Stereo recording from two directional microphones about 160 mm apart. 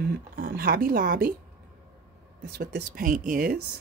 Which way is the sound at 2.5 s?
75° right (ahead or behind).